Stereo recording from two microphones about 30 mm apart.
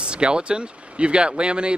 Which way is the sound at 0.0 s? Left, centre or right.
Right.